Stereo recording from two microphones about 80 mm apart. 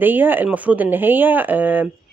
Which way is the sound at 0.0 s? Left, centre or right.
Right.